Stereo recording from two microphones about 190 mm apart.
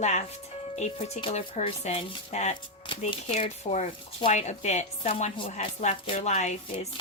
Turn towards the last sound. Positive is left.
turn(degrees=35)  # may be behind; listen again after turning